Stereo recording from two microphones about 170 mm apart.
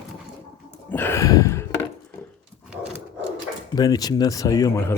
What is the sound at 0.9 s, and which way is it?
Gasp, 10° left (ahead or behind).